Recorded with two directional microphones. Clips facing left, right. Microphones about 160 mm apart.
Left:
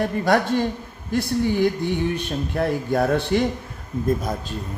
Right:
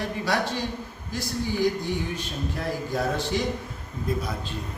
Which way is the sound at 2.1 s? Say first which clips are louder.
Left 7 dB; 60° left (ahead or behind).